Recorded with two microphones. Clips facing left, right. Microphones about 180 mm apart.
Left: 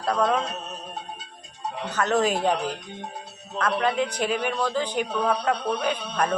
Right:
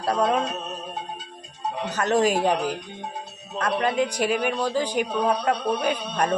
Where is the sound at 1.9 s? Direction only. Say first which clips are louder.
Right 2 dB; 10° right (ahead or behind).